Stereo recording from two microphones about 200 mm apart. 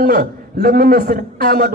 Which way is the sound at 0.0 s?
45° right (ahead or behind).